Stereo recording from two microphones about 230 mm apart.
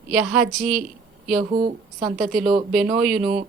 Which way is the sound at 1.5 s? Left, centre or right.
Right.